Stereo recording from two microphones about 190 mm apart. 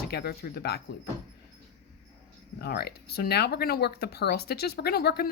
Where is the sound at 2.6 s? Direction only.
55° left (ahead or behind).